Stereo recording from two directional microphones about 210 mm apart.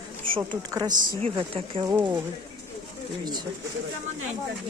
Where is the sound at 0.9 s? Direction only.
25° right (ahead or behind).